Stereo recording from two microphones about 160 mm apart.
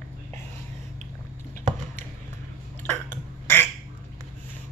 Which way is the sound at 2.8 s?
15° left (ahead or behind).